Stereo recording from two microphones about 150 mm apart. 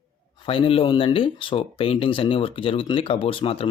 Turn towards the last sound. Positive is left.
turn(degrees=40)  # may be behind; listen again after turning